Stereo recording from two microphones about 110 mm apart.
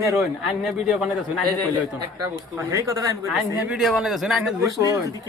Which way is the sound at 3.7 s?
Centre (ahead or behind).